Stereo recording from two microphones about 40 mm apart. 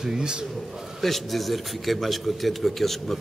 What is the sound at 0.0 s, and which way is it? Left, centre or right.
Speech, centre.